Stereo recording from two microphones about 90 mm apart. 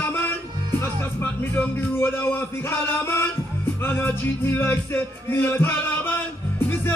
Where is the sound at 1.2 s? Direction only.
20° left (ahead or behind).